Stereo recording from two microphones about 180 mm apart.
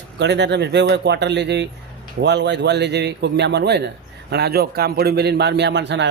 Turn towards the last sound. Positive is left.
turn(degrees=-75)  # may be behind; listen again after turning